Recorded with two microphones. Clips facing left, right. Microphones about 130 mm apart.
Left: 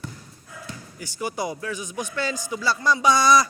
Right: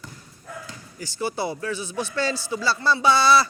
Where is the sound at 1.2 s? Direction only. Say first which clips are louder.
Right 1 dB; 30° right (ahead or behind).